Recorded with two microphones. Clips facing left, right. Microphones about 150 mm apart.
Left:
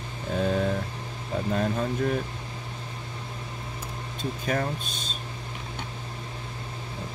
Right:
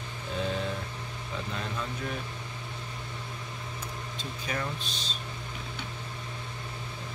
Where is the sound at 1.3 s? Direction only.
45° left (ahead or behind).